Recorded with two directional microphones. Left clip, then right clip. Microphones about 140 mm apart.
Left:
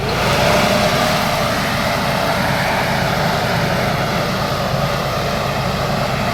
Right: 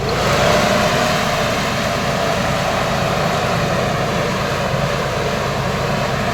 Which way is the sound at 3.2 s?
35° right (ahead or behind).